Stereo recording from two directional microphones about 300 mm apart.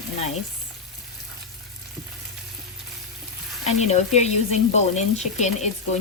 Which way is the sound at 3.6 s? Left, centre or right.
Left.